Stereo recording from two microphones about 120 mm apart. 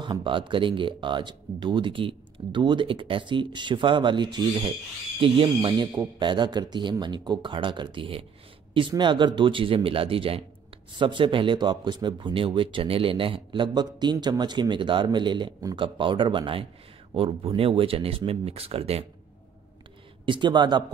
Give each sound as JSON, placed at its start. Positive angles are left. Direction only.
{"t": 0.0, "sound": "speech", "side_deg": -40}
{"t": 5.6, "sound": "speech", "side_deg": -35}
{"t": 20.2, "sound": "speech", "side_deg": -40}